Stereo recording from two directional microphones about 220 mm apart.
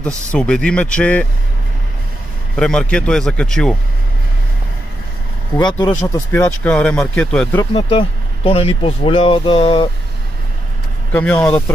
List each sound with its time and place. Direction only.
0.0 s speech: 5° left (ahead or behind)
2.5 s speech: 5° left (ahead or behind)
5.6 s speech: 20° left (ahead or behind); by 7.6 s 5° left (ahead or behind)
8.5 s speech: 25° left (ahead or behind)
11.1 s speech: 5° left (ahead or behind)